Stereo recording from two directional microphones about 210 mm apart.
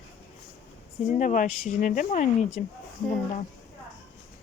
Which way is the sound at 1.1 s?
35° left (ahead or behind).